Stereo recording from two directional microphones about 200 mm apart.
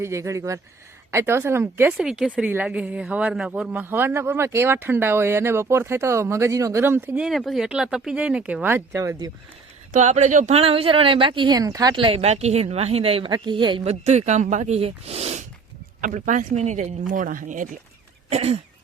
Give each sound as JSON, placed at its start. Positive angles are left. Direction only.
{"t": 0.0, "sound": "speech", "side_deg": -15}
{"t": 9.9, "sound": "speech", "side_deg": -35}